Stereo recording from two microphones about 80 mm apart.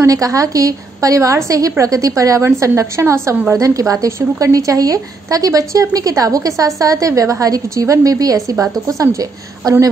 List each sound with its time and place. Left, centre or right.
0.0 s a woman's voice: right